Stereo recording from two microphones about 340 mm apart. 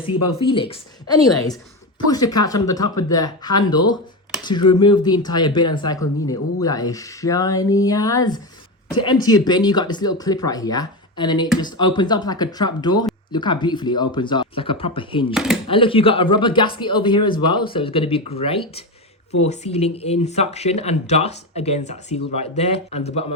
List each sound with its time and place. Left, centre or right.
0.4 s speech: centre